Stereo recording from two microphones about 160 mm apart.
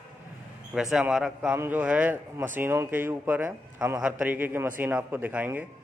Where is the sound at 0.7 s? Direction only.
5° right (ahead or behind).